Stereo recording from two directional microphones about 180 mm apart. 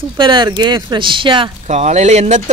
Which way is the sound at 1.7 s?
40° right (ahead or behind).